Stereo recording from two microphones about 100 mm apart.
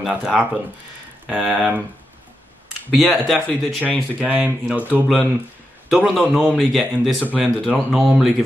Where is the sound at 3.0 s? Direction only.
5° left (ahead or behind).